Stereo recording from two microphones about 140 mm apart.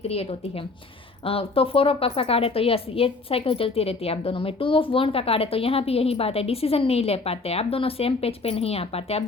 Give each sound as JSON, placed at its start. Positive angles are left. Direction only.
{"t": 0.1, "sound": "a woman's voice", "side_deg": 45}